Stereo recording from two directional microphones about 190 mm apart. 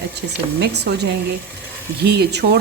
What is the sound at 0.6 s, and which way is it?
Speech, 60° right (ahead or behind).